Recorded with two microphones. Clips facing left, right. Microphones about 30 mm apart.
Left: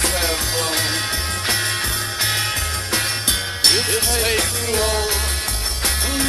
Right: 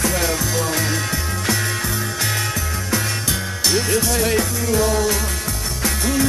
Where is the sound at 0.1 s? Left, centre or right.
Left.